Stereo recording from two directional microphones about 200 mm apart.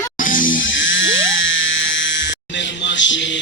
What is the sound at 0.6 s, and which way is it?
Music, 70° left (ahead or behind).